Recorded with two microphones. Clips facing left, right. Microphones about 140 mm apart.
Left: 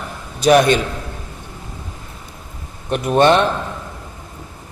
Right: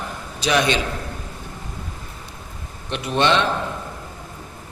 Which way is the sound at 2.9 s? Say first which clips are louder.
Left 6 dB; 50° left (ahead or behind).